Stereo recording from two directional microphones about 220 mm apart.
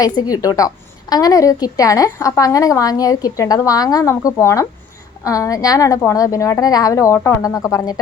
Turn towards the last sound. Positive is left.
turn(degrees=15)  # may be behind; listen again after turning